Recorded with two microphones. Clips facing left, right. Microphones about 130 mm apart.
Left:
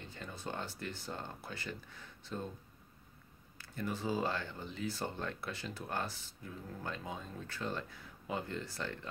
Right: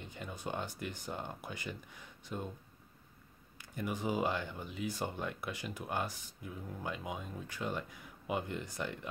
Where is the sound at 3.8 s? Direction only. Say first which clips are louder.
Right 1 dB; 15° right (ahead or behind).